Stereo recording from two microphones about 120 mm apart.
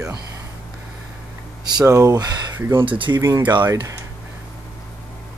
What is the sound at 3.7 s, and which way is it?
Speech, 30° right (ahead or behind).